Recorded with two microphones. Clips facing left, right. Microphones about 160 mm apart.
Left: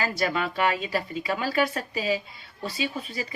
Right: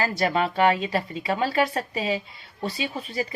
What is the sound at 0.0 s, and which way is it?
A woman's voice, 30° right (ahead or behind).